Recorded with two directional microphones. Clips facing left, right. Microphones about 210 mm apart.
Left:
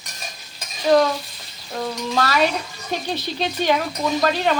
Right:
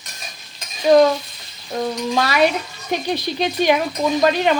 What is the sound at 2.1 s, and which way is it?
Speech, 15° right (ahead or behind).